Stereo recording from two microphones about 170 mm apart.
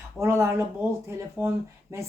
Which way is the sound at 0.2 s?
15° right (ahead or behind).